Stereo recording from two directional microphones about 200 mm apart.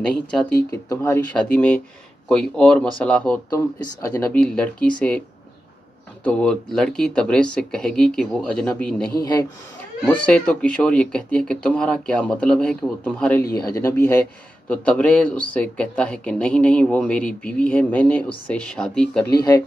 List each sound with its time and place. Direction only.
0.0 s speech: 5° left (ahead or behind)
0.7 s speech: 15° left (ahead or behind)
4.4 s speech: 5° left (ahead or behind)
6.2 s speech: 5° left (ahead or behind)
9.2 s speech: 20° left (ahead or behind)
10.0 s speech: 5° left (ahead or behind)
13.5 s speech: 15° left (ahead or behind)